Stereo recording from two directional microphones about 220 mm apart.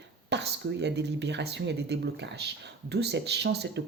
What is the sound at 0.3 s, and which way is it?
Speech, 50° right (ahead or behind).